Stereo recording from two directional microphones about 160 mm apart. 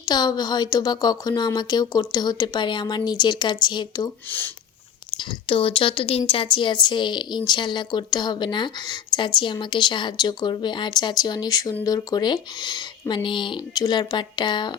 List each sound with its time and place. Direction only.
0.0 s a woman's voice: 25° left (ahead or behind)
4.3 s speech: 10° left (ahead or behind)
5.1 s a woman's voice: 30° left (ahead or behind)